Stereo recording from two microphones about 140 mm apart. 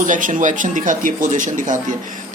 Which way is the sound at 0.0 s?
65° right (ahead or behind).